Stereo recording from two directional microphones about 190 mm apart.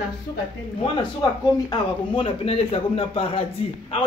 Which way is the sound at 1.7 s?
30° left (ahead or behind).